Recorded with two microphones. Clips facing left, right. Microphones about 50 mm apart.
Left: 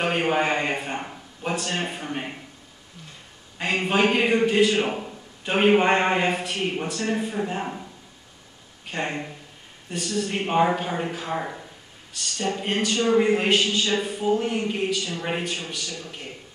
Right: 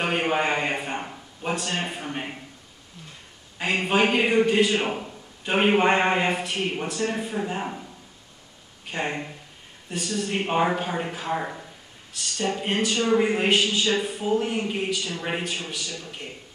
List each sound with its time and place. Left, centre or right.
0.0 s a man's voice: centre
3.5 s a woman's voice: centre
8.9 s a woman's voice: centre